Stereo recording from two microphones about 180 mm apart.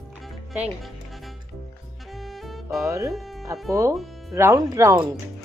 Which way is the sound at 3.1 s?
Centre (ahead or behind).